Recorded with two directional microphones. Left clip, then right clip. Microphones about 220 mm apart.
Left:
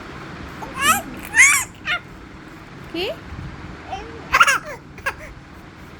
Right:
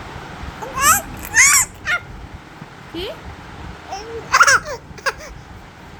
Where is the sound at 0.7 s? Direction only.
15° right (ahead or behind).